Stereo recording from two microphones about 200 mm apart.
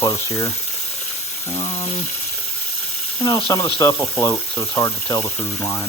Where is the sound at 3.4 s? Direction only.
15° left (ahead or behind).